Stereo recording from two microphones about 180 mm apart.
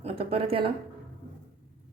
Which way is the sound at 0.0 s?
30° right (ahead or behind).